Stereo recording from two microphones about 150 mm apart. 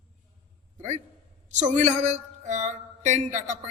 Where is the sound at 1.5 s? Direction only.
50° right (ahead or behind).